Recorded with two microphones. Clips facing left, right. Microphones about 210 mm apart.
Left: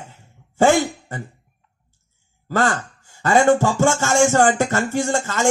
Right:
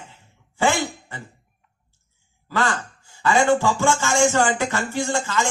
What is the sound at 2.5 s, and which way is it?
Speech, 45° left (ahead or behind).